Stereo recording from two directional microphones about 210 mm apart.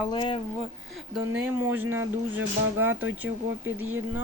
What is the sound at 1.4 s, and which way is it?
Speech, 10° right (ahead or behind).